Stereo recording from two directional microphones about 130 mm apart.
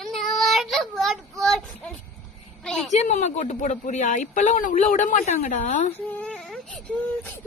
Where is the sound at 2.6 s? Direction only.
5° left (ahead or behind).